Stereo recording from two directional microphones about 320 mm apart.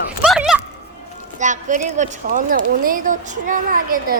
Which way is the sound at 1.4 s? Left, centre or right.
Right.